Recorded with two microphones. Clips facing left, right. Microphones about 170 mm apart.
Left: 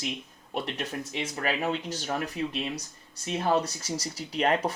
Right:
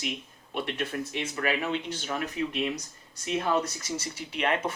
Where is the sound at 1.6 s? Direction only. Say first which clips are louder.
Left 1 dB; 40° left (ahead or behind).